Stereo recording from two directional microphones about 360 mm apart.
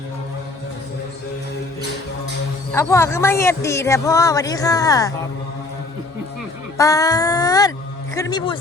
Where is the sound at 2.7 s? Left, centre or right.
Centre.